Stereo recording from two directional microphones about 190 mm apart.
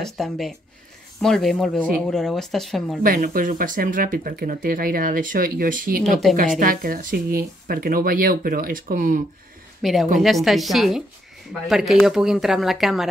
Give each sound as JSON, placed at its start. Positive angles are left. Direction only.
{"t": 0.0, "sound": "speech", "side_deg": 0}
{"t": 3.0, "sound": "speech", "side_deg": -45}
{"t": 9.8, "sound": "speech", "side_deg": 0}